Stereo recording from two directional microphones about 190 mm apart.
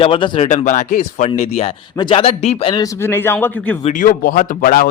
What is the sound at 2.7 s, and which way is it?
Speech, 20° left (ahead or behind).